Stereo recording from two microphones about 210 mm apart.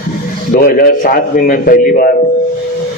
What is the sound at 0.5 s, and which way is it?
A man's voice, 45° left (ahead or behind).